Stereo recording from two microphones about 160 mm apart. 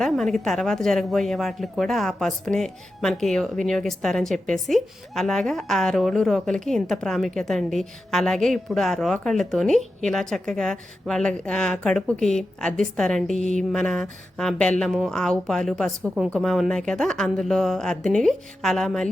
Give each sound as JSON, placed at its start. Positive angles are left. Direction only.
{"t": 0.0, "sound": "speech", "side_deg": 0}
{"t": 13.3, "sound": "mantra", "side_deg": 45}
{"t": 13.7, "sound": "speech", "side_deg": 5}